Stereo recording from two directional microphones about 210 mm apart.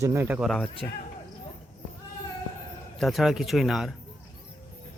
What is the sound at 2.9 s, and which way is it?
Speech, centre (ahead or behind).